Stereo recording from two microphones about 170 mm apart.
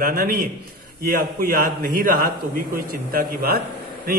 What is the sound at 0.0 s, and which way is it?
A man's voice, 60° right (ahead or behind).